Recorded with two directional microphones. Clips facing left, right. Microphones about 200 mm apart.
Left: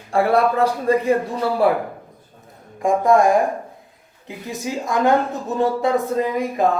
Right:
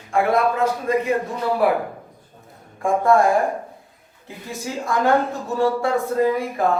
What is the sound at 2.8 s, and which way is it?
Speech, 15° left (ahead or behind).